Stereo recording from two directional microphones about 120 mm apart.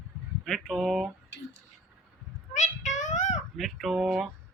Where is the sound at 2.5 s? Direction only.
90° left.